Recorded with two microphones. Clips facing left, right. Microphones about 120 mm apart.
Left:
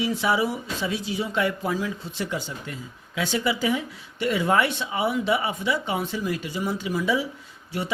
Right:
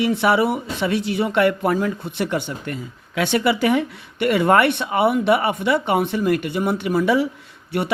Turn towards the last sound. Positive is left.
turn(degrees=-65)  # may be behind; listen again after turning